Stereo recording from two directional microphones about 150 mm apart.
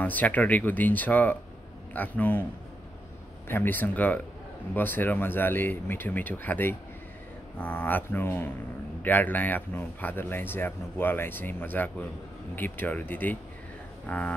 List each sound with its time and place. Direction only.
0.0 s speech: 10° left (ahead or behind)
3.4 s speech: 15° left (ahead or behind)